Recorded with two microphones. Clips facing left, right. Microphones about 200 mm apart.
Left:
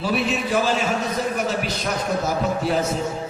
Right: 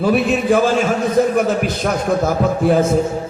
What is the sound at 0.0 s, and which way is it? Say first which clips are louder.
A man's voice: right 7 dB; 50° right (ahead or behind).